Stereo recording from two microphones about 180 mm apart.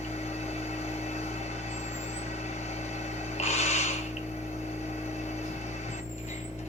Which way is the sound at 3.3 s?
40° left (ahead or behind).